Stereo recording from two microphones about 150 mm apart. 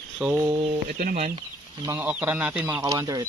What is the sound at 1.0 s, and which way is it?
Speech, 65° right (ahead or behind).